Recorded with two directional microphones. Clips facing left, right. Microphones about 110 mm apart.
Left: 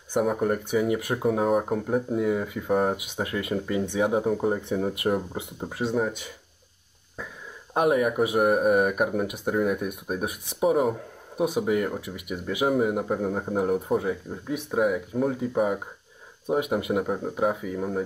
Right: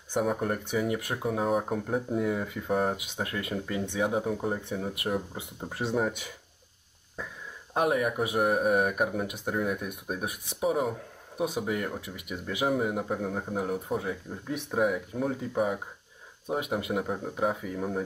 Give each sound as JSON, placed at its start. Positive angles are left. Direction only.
{"t": 0.1, "sound": "speech", "side_deg": 5}
{"t": 5.0, "sound": "speech", "side_deg": 35}
{"t": 5.7, "sound": "speech", "side_deg": 0}
{"t": 7.7, "sound": "speech", "side_deg": 10}